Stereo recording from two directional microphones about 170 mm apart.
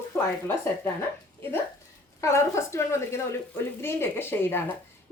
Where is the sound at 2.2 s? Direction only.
15° left (ahead or behind).